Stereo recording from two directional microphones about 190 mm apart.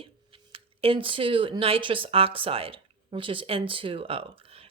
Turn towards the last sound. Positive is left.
turn(degrees=-30)  # may be behind; listen again after turning